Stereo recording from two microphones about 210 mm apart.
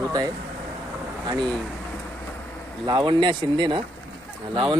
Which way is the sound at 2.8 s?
20° right (ahead or behind).